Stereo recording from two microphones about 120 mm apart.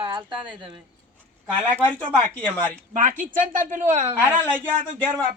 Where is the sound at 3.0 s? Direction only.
80° right.